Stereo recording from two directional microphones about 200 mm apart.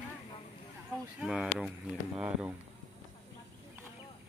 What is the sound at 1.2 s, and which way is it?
Speech, centre (ahead or behind).